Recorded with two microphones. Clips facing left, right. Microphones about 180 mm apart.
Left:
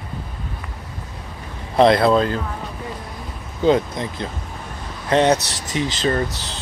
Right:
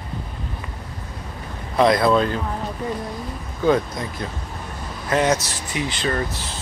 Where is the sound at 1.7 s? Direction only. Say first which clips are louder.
Left 2 dB; 30° left (ahead or behind).